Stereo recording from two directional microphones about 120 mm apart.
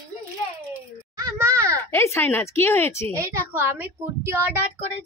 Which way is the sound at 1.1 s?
25° right (ahead or behind).